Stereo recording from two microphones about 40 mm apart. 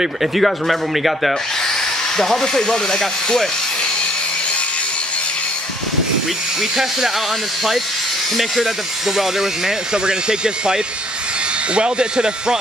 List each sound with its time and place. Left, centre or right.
0.4 s speech: centre
2.1 s speech: centre
8.4 s speech: centre
9.9 s speech: right